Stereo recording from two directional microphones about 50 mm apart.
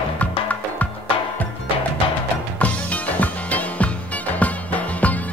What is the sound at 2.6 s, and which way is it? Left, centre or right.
Music, left.